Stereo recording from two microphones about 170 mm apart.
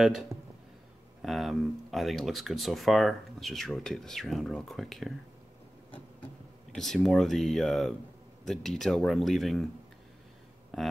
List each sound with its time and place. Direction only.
0.3 s a sound: 15° right (ahead or behind)
1.2 s speech: centre (ahead or behind)
6.7 s speech: 5° left (ahead or behind)
10.7 s speech: centre (ahead or behind)